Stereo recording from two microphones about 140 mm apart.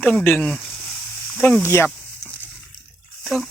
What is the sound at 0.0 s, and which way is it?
Speech, 10° left (ahead or behind).